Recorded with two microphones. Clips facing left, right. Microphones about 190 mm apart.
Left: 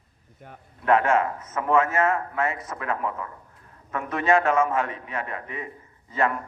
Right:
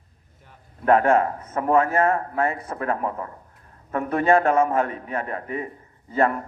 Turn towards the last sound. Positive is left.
turn(degrees=-40)  # may be behind; listen again after turning